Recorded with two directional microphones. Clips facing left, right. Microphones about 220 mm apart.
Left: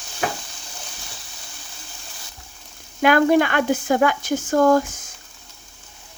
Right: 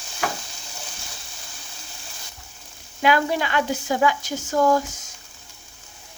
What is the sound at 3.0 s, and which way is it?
Speech, 55° left (ahead or behind).